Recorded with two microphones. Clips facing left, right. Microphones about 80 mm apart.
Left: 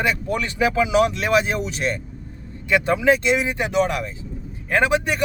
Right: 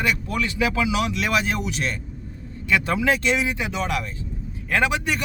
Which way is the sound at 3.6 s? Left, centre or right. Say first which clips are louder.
Left 5 dB; left.